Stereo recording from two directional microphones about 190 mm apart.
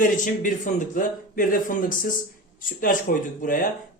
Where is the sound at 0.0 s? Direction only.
45° left (ahead or behind).